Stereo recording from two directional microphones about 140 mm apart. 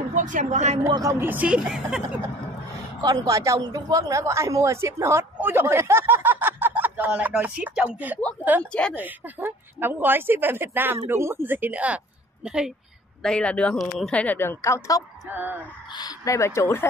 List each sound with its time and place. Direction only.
0.1 s speech: 65° right (ahead or behind)
0.8 s speech: 30° right (ahead or behind)
1.2 s speech: 10° right (ahead or behind)
3.0 s a woman's voice: 25° right (ahead or behind); by 12.7 s 5° right (ahead or behind)
13.2 s speech: 5° left (ahead or behind); by 15.0 s 25° left (ahead or behind)
15.2 s speech: 15° right (ahead or behind)
15.9 s speech: 30° left (ahead or behind)